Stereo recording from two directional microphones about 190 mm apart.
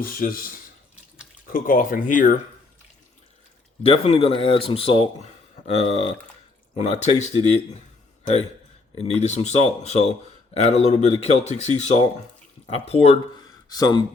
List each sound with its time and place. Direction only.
0.0 s speech: 50° left (ahead or behind)
3.8 s speech: 30° left (ahead or behind)
6.7 s speech: 35° left (ahead or behind)
9.0 s speech: 35° left (ahead or behind)
13.7 s speech: 20° left (ahead or behind)